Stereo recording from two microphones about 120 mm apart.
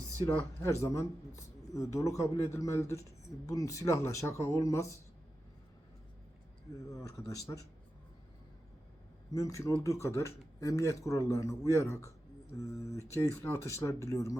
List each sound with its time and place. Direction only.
0.3 s speech: 20° left (ahead or behind)
6.9 s speech: 25° left (ahead or behind)
9.3 s speech: 30° left (ahead or behind)